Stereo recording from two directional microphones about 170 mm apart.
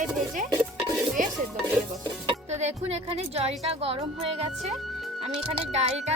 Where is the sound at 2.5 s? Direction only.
40° right (ahead or behind).